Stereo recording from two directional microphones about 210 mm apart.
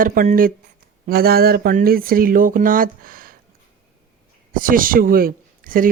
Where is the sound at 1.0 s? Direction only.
45° right (ahead or behind).